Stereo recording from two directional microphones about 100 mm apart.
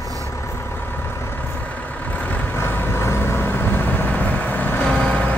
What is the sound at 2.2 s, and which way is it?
Vehicle, 20° left (ahead or behind).